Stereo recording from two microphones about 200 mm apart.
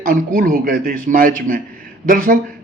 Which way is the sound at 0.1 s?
45° right (ahead or behind).